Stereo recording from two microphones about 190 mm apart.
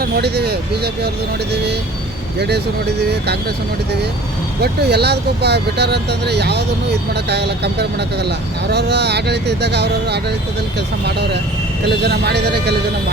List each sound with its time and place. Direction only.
0.0 s speech: 60° right (ahead or behind)
3.0 s speech: 60° right (ahead or behind)
4.6 s speech: 60° right (ahead or behind)
11.9 s speech: 60° right (ahead or behind)